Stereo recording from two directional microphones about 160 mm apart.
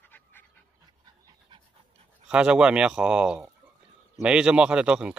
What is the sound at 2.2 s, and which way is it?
Speech, 5° right (ahead or behind).